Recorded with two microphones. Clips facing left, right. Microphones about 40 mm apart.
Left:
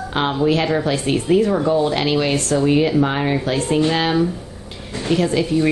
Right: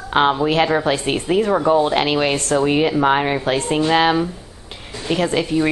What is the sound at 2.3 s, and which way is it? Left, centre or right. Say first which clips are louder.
Speech: even; right.